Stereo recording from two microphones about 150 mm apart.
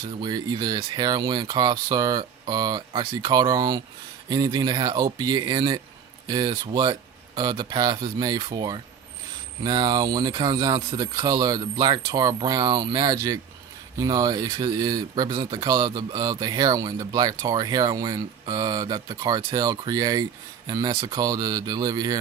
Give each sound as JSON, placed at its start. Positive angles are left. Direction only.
{"t": 0.2, "sound": "speech", "side_deg": -30}
{"t": 7.6, "sound": "speech", "side_deg": -25}